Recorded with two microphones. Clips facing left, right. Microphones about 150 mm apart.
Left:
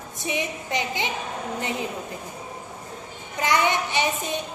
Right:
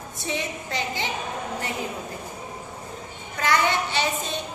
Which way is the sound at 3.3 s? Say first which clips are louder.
Left 1 dB; 15° left (ahead or behind).